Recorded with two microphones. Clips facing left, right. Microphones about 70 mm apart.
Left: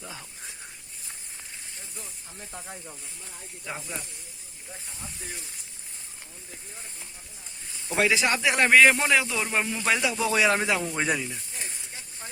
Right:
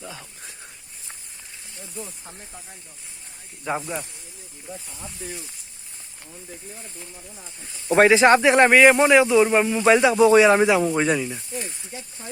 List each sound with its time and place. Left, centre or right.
7.9 s speech: right
8.7 s speech: centre; by 10.5 s right
10.5 s speech: centre
10.9 s speech: centre